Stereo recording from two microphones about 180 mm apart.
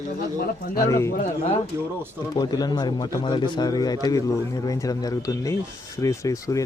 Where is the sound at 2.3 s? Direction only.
20° left (ahead or behind).